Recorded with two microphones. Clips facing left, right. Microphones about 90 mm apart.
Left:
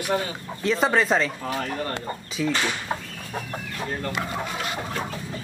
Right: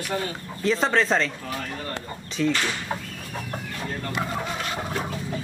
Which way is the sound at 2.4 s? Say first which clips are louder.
Right 2 dB; 5° left (ahead or behind).